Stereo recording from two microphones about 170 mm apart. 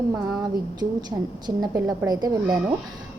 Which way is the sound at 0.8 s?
25° right (ahead or behind).